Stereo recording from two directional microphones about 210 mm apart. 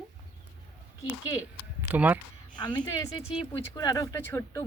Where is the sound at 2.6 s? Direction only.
20° left (ahead or behind).